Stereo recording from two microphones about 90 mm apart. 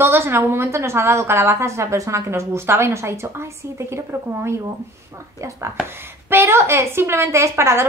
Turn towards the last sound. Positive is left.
turn(degrees=-30)  # may be behind; listen again after turning